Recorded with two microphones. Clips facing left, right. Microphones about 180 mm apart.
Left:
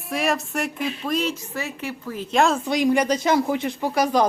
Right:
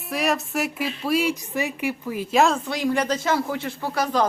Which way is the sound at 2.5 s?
15° left (ahead or behind).